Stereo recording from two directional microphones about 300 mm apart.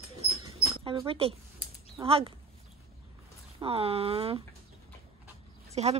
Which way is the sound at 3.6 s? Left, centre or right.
Centre.